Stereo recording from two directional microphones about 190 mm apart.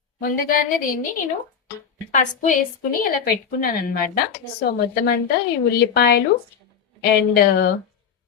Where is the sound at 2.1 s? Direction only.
40° left (ahead or behind).